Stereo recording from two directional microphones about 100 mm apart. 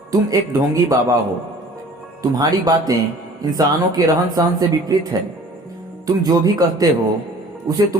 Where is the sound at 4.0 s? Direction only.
35° right (ahead or behind).